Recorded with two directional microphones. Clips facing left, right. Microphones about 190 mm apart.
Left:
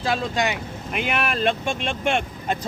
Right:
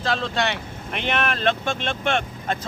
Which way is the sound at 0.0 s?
10° left (ahead or behind).